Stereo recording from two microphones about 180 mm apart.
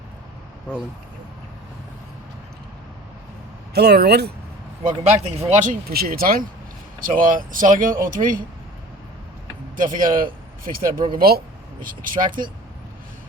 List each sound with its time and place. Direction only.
3.8 s speech: 65° right (ahead or behind)
5.3 s speech: 35° right (ahead or behind)
5.9 s speech: 55° right (ahead or behind)
9.7 s speech: 50° right (ahead or behind)